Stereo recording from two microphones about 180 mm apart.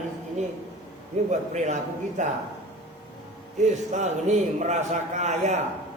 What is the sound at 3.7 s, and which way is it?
A man's voice, 40° right (ahead or behind).